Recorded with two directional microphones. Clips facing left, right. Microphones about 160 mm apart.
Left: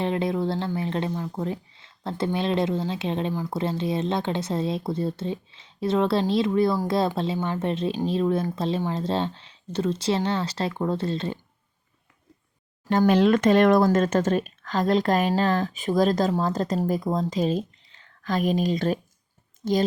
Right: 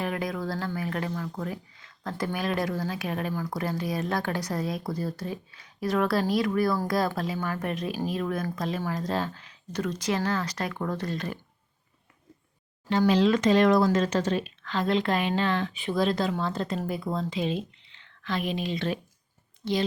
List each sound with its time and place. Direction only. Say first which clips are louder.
0.0 s speech: left 6 dB; 25° left (ahead or behind)
12.9 s speech: left 3 dB; 50° left (ahead or behind)